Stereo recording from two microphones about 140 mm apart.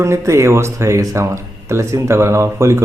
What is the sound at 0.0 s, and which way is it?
Speech, 20° right (ahead or behind).